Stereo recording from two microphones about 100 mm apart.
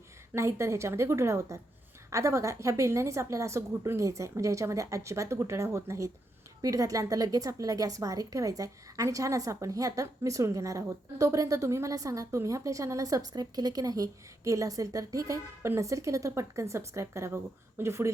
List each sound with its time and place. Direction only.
0.3 s a woman's voice: 25° right (ahead or behind)